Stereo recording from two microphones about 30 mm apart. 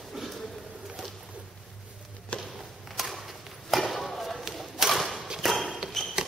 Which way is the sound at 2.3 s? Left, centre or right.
Left.